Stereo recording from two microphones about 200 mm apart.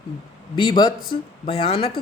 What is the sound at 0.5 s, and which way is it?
Speech, 20° left (ahead or behind).